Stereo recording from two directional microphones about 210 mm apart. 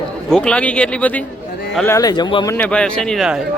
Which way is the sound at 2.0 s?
20° left (ahead or behind).